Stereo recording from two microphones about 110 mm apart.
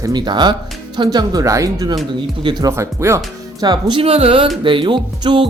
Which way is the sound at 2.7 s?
25° right (ahead or behind).